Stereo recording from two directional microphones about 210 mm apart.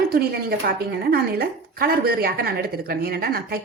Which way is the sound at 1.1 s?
45° right (ahead or behind).